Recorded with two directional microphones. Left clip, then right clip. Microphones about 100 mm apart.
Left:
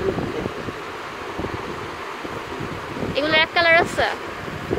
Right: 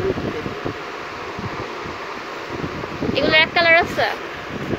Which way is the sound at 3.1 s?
20° left (ahead or behind).